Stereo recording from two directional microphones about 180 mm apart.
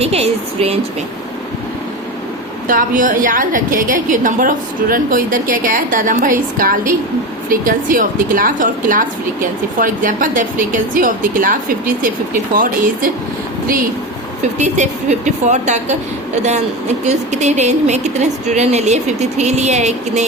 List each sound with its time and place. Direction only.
0.0 s speech: 35° right (ahead or behind)
2.6 s a woman's voice: 50° right (ahead or behind)
14.6 s speech: 40° right (ahead or behind)